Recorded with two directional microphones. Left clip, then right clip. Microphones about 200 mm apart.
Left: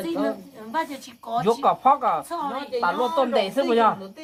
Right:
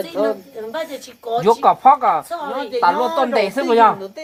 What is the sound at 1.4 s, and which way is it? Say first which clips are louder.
Speech: right 7 dB; 45° right (ahead or behind).